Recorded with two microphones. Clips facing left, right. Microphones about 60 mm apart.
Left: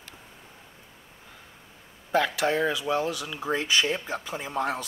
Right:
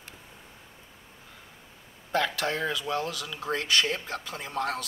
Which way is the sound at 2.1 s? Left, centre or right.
Centre.